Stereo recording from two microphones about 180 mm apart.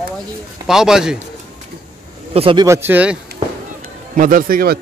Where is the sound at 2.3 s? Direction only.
30° right (ahead or behind).